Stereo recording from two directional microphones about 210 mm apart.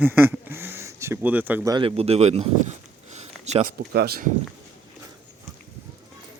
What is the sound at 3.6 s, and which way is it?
Speech, 50° right (ahead or behind).